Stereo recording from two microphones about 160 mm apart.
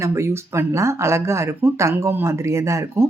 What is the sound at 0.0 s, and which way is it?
Speech, 20° right (ahead or behind).